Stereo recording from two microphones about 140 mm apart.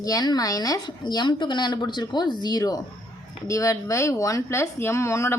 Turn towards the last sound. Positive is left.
turn(degrees=20)  # may be behind; listen again after turning